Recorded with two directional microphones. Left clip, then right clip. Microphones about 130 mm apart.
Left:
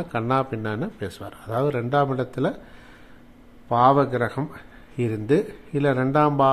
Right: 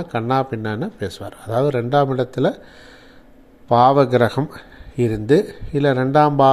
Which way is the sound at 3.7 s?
40° right (ahead or behind).